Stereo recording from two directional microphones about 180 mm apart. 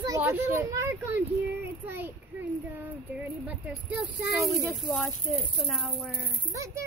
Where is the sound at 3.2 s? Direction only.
10° right (ahead or behind).